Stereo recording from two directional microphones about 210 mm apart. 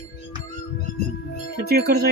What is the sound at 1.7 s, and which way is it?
Speech, 50° right (ahead or behind).